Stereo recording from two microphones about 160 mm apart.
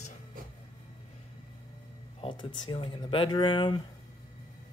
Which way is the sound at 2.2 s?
30° left (ahead or behind).